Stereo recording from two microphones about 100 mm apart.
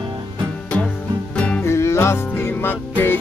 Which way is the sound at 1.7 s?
25° left (ahead or behind).